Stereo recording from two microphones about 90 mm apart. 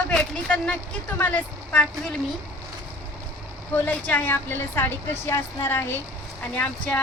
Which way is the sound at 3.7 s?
20° left (ahead or behind).